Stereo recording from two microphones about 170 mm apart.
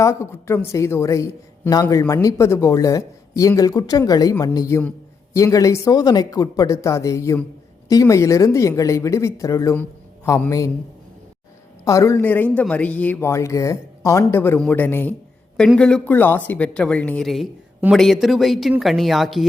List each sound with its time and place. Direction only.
0.0 s a woman's voice: 15° left (ahead or behind)
11.9 s speech: 20° left (ahead or behind); by 19.5 s centre (ahead or behind)